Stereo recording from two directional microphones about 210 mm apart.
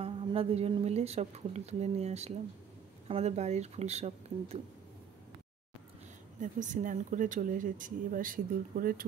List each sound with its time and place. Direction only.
0.0 s speech: 25° right (ahead or behind)
6.4 s speech: 35° right (ahead or behind)